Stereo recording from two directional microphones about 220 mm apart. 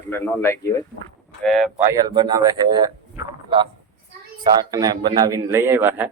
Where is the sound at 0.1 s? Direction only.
10° left (ahead or behind).